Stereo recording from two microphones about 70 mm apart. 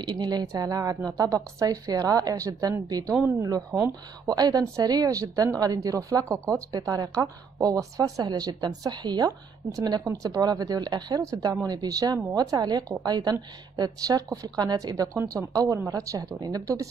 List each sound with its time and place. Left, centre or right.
0.1 s speech: right
0.5 s a woman's voice: right
4.3 s a woman's voice: right
5.2 s speech: right
6.7 s a woman's voice: right
10.0 s a woman's voice: right
11.1 s a woman's voice: right
11.6 s a woman's voice: right
16.3 s a woman's voice: right